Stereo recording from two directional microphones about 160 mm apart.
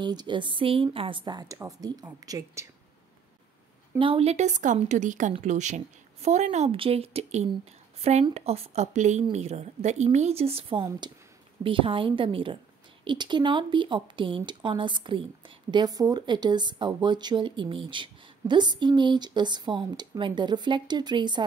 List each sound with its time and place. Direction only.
0.0 s speech: 25° right (ahead or behind)
4.0 s a woman's voice: 35° right (ahead or behind)